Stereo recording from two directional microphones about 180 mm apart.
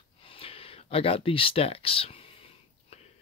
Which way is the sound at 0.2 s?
30° left (ahead or behind).